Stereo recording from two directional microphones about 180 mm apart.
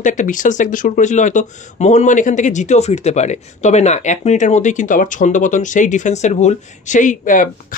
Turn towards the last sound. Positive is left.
turn(degrees=50)  # may be behind; listen again after turning